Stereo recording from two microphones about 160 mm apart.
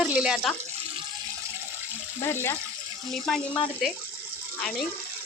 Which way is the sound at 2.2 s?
15° left (ahead or behind).